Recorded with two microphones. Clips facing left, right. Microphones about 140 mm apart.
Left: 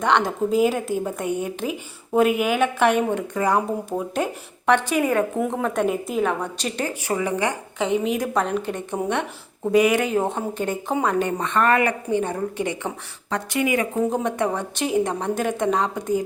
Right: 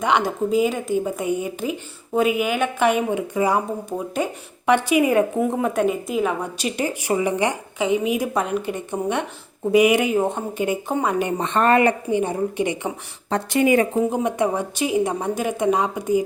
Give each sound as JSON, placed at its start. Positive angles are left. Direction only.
{"t": 0.0, "sound": "a woman's voice", "side_deg": -5}
{"t": 4.6, "sound": "speech", "side_deg": -10}
{"t": 7.8, "sound": "a woman's voice", "side_deg": -5}
{"t": 10.2, "sound": "a woman's voice", "side_deg": 0}
{"t": 12.0, "sound": "speech", "side_deg": -10}
{"t": 13.3, "sound": "speech", "side_deg": -30}
{"t": 14.1, "sound": "speech", "side_deg": -10}